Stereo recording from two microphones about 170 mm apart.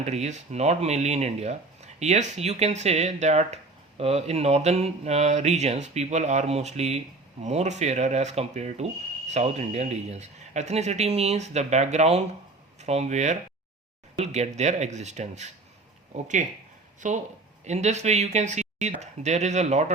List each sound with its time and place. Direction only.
0.0 s speech: 40° right (ahead or behind)